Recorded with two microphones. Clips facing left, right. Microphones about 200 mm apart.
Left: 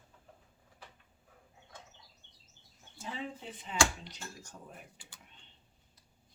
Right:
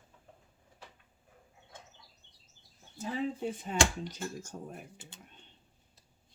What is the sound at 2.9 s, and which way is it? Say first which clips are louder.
Speech: right 7 dB; 40° right (ahead or behind).